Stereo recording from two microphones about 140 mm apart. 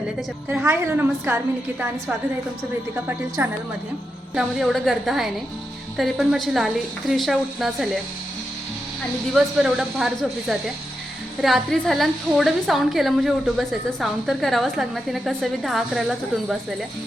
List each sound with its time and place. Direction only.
0.4 s a woman's voice: 15° right (ahead or behind)
3.1 s a woman's voice: 15° right (ahead or behind)
4.4 s a woman's voice: centre (ahead or behind)
9.3 s a woman's voice: 5° right (ahead or behind)
11.3 s a woman's voice: centre (ahead or behind)